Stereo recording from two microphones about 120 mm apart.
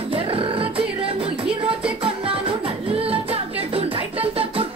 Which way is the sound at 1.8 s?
50° right (ahead or behind).